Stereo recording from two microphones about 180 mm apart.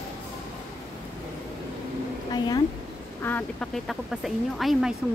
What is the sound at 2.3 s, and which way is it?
Speech, 25° left (ahead or behind).